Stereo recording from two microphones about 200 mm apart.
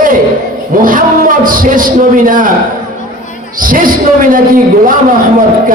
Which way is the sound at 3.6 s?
45° right (ahead or behind).